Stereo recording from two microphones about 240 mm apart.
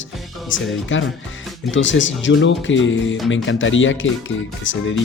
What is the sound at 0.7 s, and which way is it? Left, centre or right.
Speech, left.